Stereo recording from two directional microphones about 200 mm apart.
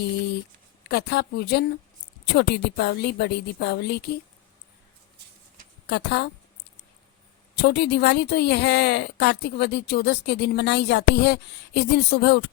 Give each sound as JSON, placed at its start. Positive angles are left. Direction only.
{"t": 0.9, "sound": "speech", "side_deg": 55}
{"t": 5.9, "sound": "speech", "side_deg": 55}
{"t": 7.6, "sound": "speech", "side_deg": 55}